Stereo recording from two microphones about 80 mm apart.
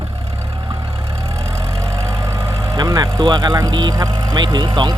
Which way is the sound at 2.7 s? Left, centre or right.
Right.